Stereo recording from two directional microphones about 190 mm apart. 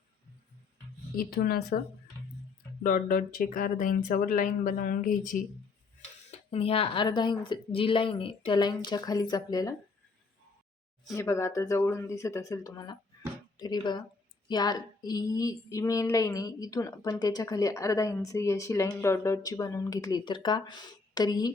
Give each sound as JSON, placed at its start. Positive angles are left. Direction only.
{"t": 1.1, "sound": "speech", "side_deg": 50}
{"t": 2.8, "sound": "speech", "side_deg": 45}
{"t": 6.5, "sound": "speech", "side_deg": 30}
{"t": 11.1, "sound": "speech", "side_deg": 15}